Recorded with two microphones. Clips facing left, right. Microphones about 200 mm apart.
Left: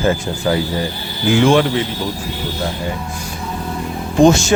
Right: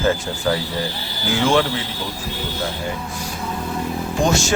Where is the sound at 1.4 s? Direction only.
15° left (ahead or behind).